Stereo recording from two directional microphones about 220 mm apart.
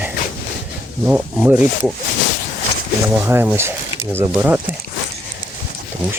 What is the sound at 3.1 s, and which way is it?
Speech, 10° right (ahead or behind).